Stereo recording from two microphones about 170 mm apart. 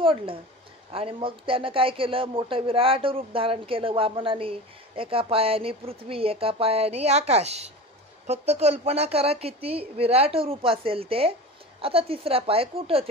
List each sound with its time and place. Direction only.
0.0 s speech: 30° right (ahead or behind)